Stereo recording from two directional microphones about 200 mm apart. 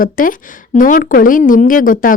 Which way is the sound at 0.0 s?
45° left (ahead or behind).